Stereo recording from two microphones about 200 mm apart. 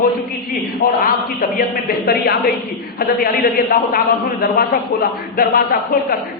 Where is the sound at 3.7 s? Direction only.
50° left (ahead or behind).